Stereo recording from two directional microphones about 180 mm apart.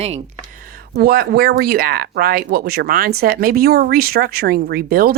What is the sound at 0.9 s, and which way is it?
Speech, 60° right (ahead or behind).